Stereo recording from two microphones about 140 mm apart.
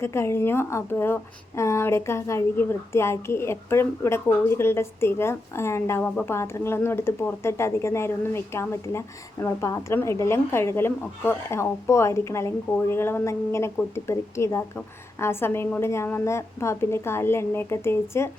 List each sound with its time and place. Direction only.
0.0 s a woman's voice: 20° left (ahead or behind)